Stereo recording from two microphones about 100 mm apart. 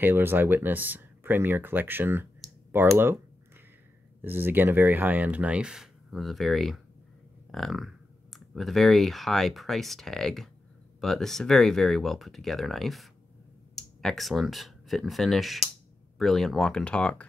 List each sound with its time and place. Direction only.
0.0 s speech: 20° right (ahead or behind)
4.2 s speech: 20° right (ahead or behind); by 17.3 s 10° left (ahead or behind)